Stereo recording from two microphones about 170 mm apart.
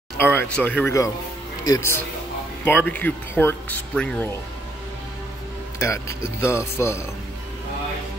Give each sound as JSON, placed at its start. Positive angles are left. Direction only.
{"t": 0.2, "sound": "speech", "side_deg": 10}
{"t": 5.8, "sound": "speech", "side_deg": 15}